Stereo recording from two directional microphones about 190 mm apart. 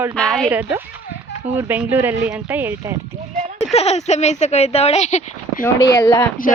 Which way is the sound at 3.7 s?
35° left (ahead or behind).